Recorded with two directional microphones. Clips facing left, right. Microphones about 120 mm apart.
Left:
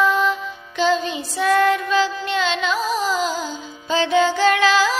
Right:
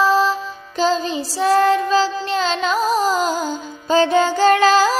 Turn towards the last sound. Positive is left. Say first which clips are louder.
# right 3 dB
turn(degrees=-40)  # may be behind; listen again after turning